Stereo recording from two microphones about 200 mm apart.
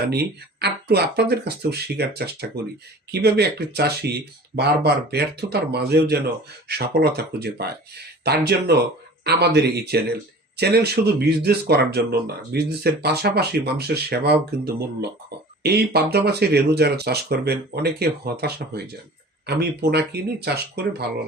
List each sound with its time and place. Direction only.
0.1 s speech: 55° right (ahead or behind)